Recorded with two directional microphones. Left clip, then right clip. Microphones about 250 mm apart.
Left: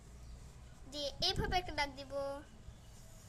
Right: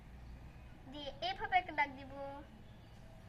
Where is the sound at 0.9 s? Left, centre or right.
Left.